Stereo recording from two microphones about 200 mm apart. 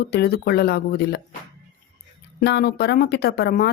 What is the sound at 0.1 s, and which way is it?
Speech, 50° left (ahead or behind).